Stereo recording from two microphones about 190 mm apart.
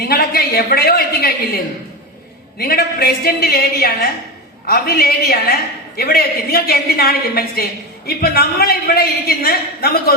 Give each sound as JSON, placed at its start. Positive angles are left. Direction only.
{"t": 0.0, "sound": "a woman's voice", "side_deg": 55}